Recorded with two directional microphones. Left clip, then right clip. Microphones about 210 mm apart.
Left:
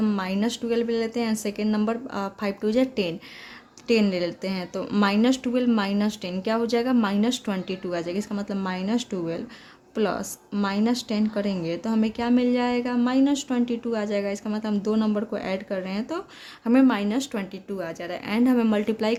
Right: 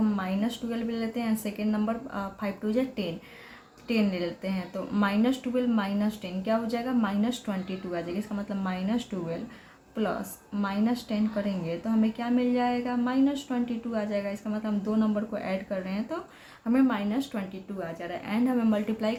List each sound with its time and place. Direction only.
0.0 s a woman's voice: 50° left (ahead or behind)